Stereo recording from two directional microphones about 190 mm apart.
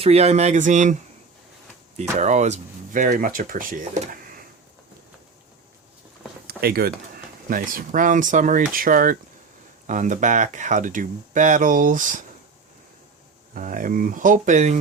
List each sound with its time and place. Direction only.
0.0 s speech: 35° right (ahead or behind)
2.1 s speech: 40° right (ahead or behind)
6.6 s speech: 55° right (ahead or behind)
13.5 s speech: 45° right (ahead or behind)